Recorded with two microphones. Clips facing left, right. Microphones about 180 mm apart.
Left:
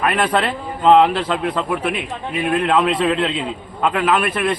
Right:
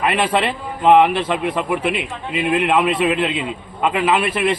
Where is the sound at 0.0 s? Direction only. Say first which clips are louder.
Even; 10° right (ahead or behind).